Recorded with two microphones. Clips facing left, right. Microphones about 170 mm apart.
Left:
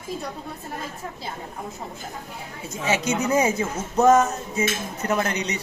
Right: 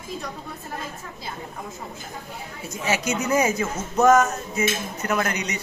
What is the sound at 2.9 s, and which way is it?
A man's voice, 30° left (ahead or behind).